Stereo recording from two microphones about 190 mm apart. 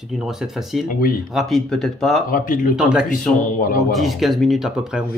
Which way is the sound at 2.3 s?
45° left (ahead or behind).